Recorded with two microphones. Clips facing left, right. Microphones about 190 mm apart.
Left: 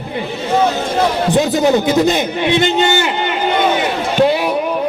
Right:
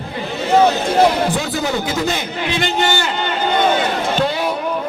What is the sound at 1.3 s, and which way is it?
A man's voice, 20° left (ahead or behind).